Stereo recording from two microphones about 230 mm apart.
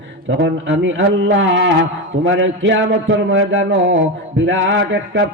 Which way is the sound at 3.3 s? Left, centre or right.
Right.